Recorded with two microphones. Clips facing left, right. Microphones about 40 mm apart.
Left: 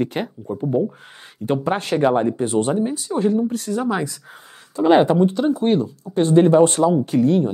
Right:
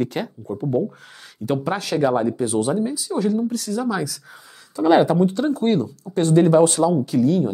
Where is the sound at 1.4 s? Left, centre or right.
Left.